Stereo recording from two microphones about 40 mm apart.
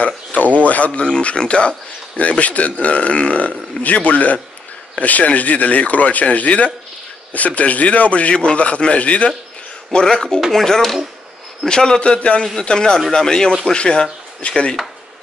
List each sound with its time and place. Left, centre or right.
0.0 s a sound: left
0.6 s speech: left
1.0 s speech: left
9.9 s a man's voice: centre